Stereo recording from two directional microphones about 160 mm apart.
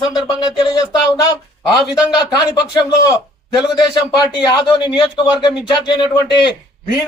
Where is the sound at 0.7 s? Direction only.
25° left (ahead or behind).